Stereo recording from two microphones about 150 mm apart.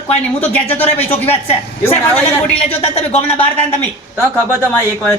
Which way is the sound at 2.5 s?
45° left (ahead or behind).